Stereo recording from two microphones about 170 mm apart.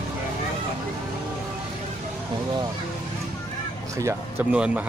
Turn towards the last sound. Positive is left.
turn(degrees=-5)  # may be behind; listen again after turning